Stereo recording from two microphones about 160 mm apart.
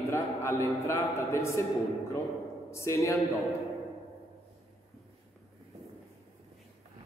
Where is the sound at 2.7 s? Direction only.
20° left (ahead or behind).